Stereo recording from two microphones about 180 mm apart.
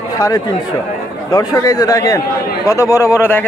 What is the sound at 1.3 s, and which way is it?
A man's voice, 20° left (ahead or behind).